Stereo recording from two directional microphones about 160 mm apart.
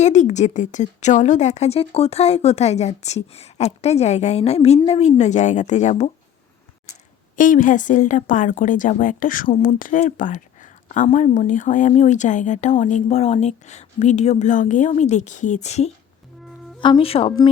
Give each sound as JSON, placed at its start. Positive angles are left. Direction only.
{"t": 0.0, "sound": "speech", "side_deg": 45}
{"t": 7.3, "sound": "a woman's voice", "side_deg": 55}
{"t": 16.8, "sound": "speech", "side_deg": 35}